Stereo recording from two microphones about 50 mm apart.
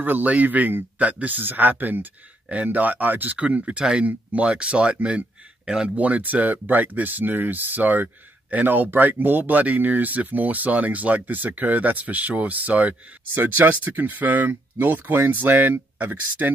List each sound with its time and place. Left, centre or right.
0.0 s speech: right
3.3 s speech: right